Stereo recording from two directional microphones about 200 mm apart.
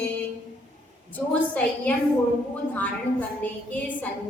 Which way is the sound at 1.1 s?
5° left (ahead or behind).